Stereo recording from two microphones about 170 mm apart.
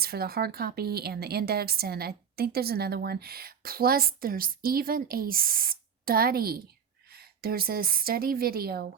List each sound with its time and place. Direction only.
0.0 s a woman's voice: 65° right (ahead or behind)